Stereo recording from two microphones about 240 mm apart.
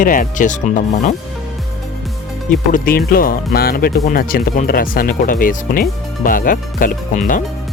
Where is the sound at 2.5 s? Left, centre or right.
Left.